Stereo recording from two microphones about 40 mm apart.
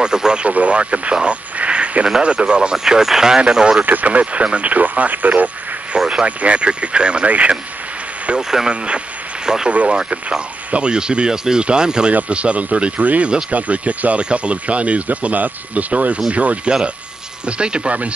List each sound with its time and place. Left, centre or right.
0.0 s speech: centre
0.5 s speech: right
2.8 s speech: centre
3.8 s speech: right
6.0 s speech: right
8.4 s speech: centre
9.7 s speech: right
12.1 s speech: right